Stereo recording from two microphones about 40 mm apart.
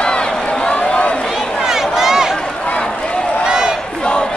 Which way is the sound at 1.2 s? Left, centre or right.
Centre.